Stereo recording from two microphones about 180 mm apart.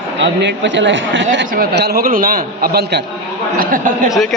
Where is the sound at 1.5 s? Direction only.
55° right (ahead or behind).